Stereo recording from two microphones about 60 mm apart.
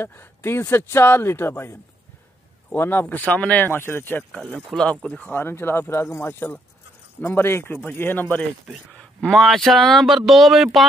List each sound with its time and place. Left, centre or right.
0.0 s a man's voice: left
3.7 s a man's voice: left
4.7 s speech: centre
5.2 s a man's voice: left
8.9 s speech: centre